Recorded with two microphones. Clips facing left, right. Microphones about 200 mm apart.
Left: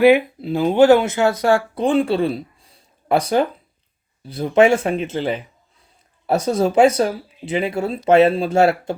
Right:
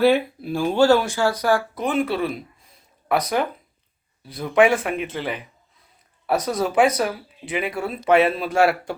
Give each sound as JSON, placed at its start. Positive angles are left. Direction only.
{"t": 0.0, "sound": "speech", "side_deg": 15}